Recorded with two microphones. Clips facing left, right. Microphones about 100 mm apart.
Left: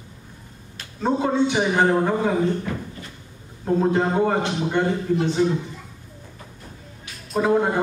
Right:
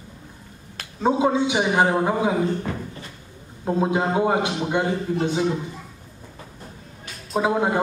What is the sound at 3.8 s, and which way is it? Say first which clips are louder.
A man's voice: left 1 dB; 10° right (ahead or behind).